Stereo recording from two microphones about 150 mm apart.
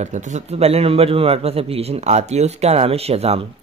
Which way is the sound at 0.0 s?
50° right (ahead or behind).